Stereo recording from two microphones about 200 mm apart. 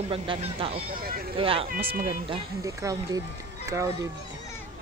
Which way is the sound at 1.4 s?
25° right (ahead or behind).